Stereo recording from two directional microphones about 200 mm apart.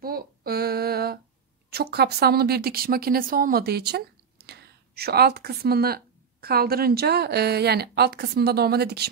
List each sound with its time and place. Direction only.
0.0 s female singing: 50° right (ahead or behind)
1.7 s a woman's voice: 55° right (ahead or behind)